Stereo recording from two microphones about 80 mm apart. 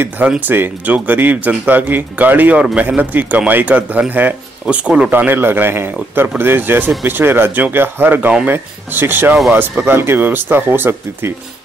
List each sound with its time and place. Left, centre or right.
0.4 s speech: right